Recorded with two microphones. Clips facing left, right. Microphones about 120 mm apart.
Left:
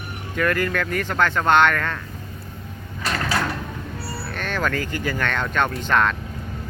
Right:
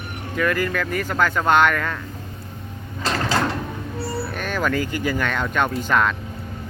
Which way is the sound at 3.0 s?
30° right (ahead or behind).